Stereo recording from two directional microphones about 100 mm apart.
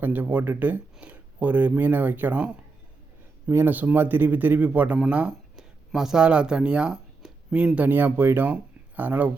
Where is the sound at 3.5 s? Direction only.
20° right (ahead or behind).